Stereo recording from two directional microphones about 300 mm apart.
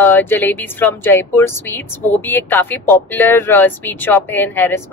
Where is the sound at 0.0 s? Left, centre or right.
Centre.